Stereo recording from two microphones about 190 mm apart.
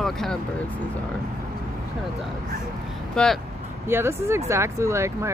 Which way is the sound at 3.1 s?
5° left (ahead or behind).